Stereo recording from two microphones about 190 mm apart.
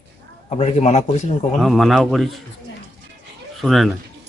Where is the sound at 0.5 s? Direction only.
35° left (ahead or behind).